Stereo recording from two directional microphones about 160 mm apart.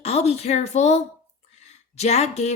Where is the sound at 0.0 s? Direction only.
40° left (ahead or behind).